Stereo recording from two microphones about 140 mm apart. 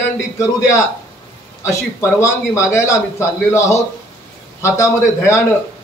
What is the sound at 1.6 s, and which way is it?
A man's voice, 20° left (ahead or behind).